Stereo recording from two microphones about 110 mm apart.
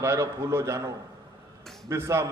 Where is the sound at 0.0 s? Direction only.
30° right (ahead or behind).